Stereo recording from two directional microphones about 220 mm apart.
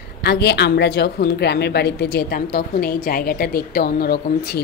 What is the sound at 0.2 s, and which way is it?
A woman's voice, 50° left (ahead or behind).